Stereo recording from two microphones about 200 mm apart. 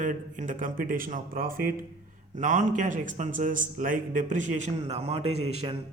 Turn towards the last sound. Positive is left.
turn(degrees=-30)  # may be behind; listen again after turning